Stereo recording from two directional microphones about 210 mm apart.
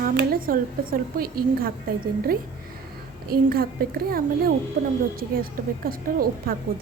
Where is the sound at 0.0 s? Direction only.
45° right (ahead or behind).